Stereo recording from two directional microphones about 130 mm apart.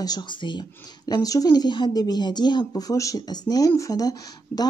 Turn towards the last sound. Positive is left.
turn(degrees=30)  # may be behind; listen again after turning